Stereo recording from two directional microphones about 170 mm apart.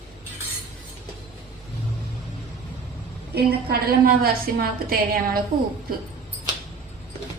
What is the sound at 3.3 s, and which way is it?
A woman's voice, 70° right (ahead or behind).